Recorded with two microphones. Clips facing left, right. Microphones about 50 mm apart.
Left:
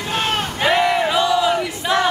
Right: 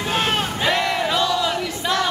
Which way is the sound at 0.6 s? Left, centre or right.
Left.